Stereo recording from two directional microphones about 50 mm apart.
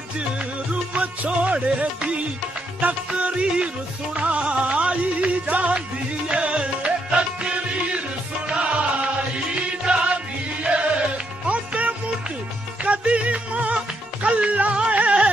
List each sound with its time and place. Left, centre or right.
0.9 s music: right
3.1 s music: centre
10.6 s music: right